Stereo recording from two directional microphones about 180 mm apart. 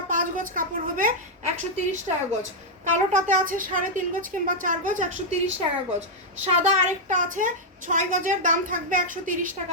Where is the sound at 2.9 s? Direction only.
45° right (ahead or behind).